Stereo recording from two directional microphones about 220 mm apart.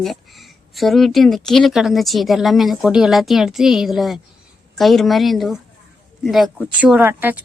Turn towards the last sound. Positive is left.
turn(degrees=-10)  # may be behind; listen again after turning